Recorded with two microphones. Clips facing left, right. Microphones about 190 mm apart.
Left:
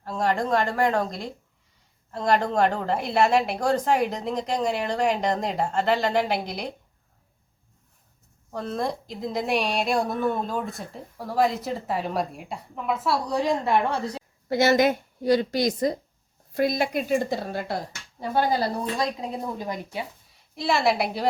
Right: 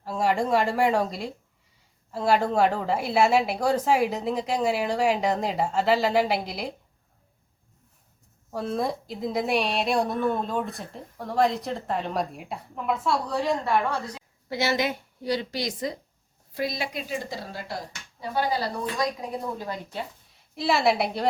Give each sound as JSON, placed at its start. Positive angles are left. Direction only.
{"t": 0.0, "sound": "a woman's voice", "side_deg": -10}
{"t": 8.4, "sound": "a woman's voice", "side_deg": -5}
{"t": 13.2, "sound": "a woman's voice", "side_deg": 15}
{"t": 14.5, "sound": "a woman's voice", "side_deg": 50}
{"t": 18.9, "sound": "a woman's voice", "side_deg": 20}
{"t": 20.3, "sound": "a woman's voice", "side_deg": 0}